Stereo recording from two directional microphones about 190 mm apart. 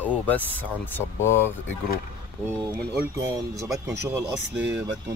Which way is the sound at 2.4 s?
15° right (ahead or behind).